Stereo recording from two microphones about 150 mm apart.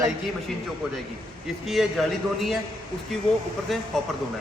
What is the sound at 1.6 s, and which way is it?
Speech, centre (ahead or behind).